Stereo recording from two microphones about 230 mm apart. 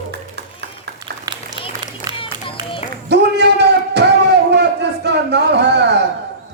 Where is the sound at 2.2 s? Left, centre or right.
Left.